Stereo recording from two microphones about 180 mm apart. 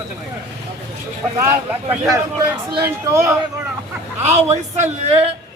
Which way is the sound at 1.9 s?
15° right (ahead or behind).